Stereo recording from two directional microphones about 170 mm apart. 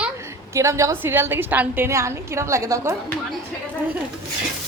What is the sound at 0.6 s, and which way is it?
A woman's voice, 15° right (ahead or behind).